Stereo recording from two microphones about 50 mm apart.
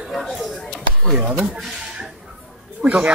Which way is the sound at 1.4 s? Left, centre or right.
Centre.